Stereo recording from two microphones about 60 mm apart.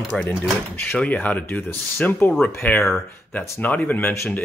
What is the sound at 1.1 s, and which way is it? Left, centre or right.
Speech, left.